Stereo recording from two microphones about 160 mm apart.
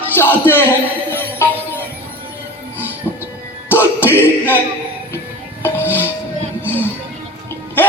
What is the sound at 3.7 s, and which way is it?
Music, 15° left (ahead or behind).